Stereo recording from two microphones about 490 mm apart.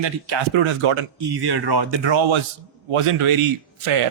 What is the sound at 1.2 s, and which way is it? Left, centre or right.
A man's voice, right.